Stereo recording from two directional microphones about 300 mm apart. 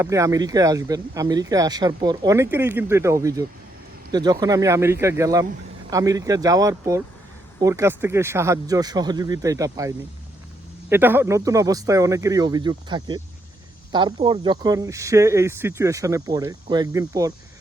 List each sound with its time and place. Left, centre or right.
0.0 s speech: centre